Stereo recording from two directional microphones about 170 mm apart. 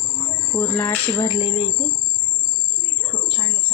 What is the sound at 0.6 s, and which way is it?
Speech, 10° left (ahead or behind).